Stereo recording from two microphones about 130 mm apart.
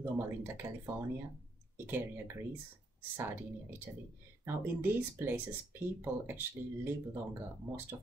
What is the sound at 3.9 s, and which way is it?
Speech, 25° right (ahead or behind).